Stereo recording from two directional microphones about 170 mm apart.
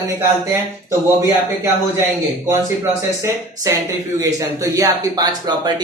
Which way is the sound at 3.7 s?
20° right (ahead or behind).